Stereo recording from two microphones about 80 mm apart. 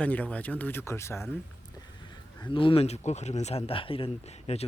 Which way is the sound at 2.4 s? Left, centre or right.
Left.